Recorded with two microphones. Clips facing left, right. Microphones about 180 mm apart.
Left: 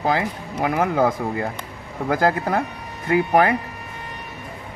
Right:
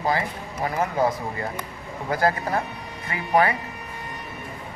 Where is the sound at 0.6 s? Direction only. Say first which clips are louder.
Left 4 dB; 70° left (ahead or behind).